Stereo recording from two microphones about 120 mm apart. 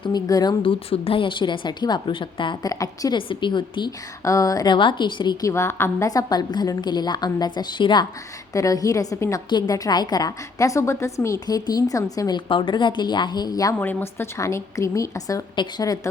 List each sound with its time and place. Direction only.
0.0 s a woman's voice: 35° left (ahead or behind)
0.6 s a woman's voice: 50° left (ahead or behind)
2.7 s a woman's voice: 30° left (ahead or behind)
3.2 s a woman's voice: 45° left (ahead or behind)
4.2 s a woman's voice: 25° left (ahead or behind)
5.5 s a woman's voice: 20° left (ahead or behind); by 8.0 s 40° left (ahead or behind)
8.5 s a woman's voice: 30° left (ahead or behind)
12.5 s a woman's voice: 45° left (ahead or behind)
13.7 s a woman's voice: 20° left (ahead or behind)